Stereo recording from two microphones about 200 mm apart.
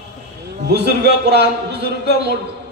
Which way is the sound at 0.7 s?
55° right (ahead or behind).